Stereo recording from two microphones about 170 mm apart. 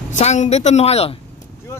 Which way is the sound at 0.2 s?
40° left (ahead or behind).